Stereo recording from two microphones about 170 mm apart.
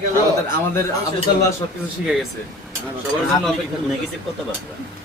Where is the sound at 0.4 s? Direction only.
15° left (ahead or behind).